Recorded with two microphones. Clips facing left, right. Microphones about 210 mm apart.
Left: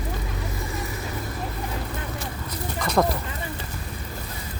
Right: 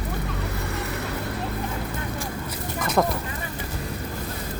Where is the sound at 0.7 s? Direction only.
65° right (ahead or behind).